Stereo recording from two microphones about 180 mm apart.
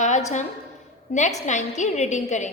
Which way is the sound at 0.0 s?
40° left (ahead or behind).